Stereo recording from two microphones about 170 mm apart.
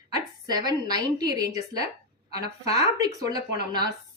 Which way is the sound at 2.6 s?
35° left (ahead or behind).